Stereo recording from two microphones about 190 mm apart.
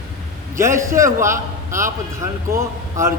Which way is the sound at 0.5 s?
15° right (ahead or behind).